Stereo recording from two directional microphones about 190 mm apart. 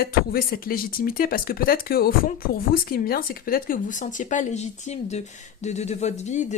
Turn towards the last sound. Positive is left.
turn(degrees=40)  # may be behind; listen again after turning